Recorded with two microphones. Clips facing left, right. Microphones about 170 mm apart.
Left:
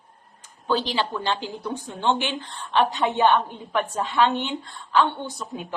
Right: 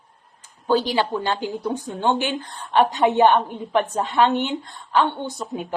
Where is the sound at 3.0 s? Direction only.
20° right (ahead or behind).